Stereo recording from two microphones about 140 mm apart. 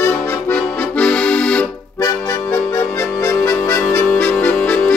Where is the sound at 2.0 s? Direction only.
25° left (ahead or behind).